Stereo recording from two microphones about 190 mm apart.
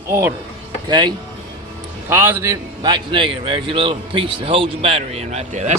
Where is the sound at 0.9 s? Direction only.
20° right (ahead or behind).